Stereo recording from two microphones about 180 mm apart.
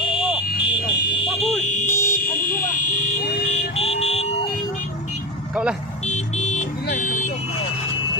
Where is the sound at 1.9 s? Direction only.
15° left (ahead or behind).